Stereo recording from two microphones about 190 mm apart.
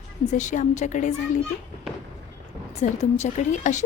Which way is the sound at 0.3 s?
40° left (ahead or behind).